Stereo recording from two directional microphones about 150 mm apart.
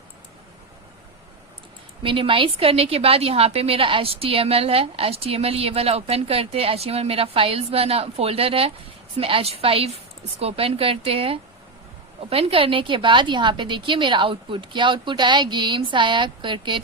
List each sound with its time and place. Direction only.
2.0 s a woman's voice: 35° right (ahead or behind)